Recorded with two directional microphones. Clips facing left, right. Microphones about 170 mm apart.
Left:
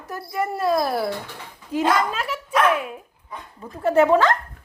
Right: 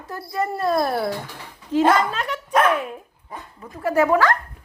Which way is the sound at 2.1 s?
5° left (ahead or behind).